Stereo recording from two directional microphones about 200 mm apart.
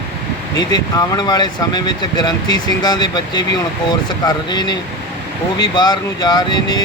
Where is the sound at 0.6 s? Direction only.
20° left (ahead or behind).